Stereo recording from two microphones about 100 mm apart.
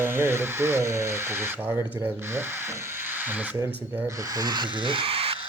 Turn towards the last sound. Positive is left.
turn(degrees=-70)  # may be behind; listen again after turning